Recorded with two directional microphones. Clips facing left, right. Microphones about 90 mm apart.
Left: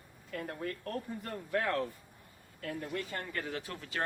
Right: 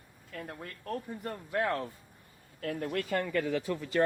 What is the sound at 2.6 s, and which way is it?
Speech, 50° right (ahead or behind).